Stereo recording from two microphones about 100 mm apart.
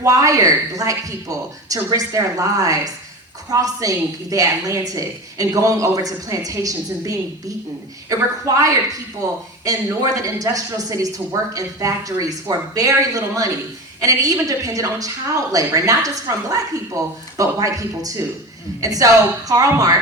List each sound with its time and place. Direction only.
0.0 s a woman's voice: 35° right (ahead or behind)